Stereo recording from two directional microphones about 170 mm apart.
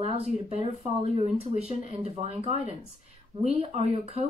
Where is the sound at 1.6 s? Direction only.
40° right (ahead or behind).